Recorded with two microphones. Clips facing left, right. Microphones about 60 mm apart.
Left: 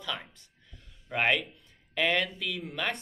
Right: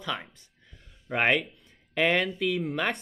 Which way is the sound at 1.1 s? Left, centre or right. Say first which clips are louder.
Right 3 dB; right.